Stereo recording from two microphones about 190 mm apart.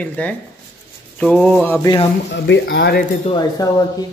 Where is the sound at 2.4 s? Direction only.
70° left (ahead or behind).